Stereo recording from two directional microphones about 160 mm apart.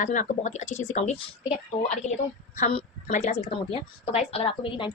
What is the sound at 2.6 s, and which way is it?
A woman's voice, 45° left (ahead or behind).